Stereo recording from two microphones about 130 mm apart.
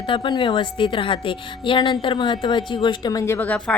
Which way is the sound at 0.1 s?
35° left (ahead or behind).